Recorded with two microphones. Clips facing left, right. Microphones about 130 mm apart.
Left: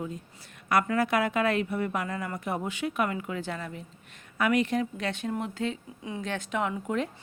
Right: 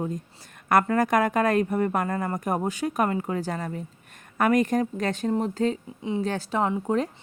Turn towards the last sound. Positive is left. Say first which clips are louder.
# right 5 dB
turn(degrees=-35)  # may be behind; listen again after turning